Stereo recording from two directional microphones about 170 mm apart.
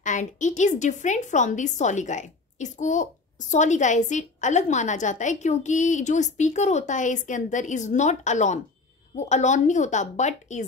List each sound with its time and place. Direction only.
0.0 s a woman's voice: 45° left (ahead or behind)